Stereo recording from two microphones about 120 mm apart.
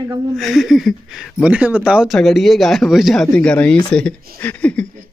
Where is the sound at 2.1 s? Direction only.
Centre (ahead or behind).